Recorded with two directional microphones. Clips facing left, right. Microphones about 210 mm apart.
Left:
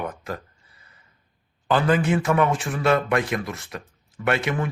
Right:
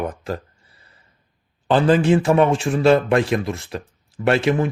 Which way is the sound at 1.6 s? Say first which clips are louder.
Right 5 dB; 30° right (ahead or behind).